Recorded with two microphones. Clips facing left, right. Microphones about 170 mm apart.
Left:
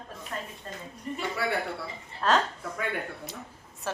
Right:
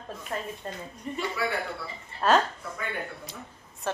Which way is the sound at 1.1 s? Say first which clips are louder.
Right 1 dB; centre (ahead or behind).